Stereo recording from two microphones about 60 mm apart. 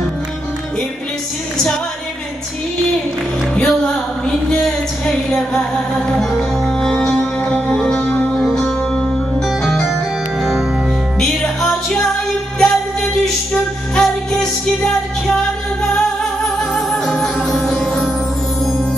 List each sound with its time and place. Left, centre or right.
3.5 s a sound: centre
6.1 s music: centre
6.8 s music: centre
7.4 s music: left
8.4 s music: centre
11.1 s music: centre
16.7 s music: centre